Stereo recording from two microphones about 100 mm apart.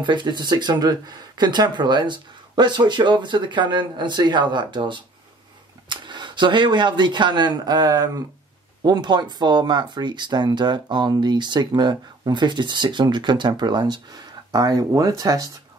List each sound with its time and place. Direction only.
0.0 s speech: 50° right (ahead or behind)